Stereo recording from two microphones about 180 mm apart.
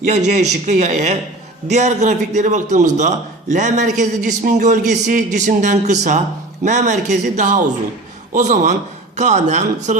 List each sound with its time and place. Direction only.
0.0 s a man's voice: 40° right (ahead or behind)